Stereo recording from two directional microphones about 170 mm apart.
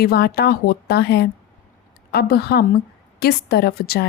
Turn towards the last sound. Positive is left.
turn(degrees=65)  # may be behind; listen again after turning